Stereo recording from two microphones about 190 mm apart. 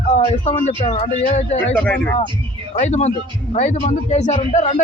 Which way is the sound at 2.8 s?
35° left (ahead or behind).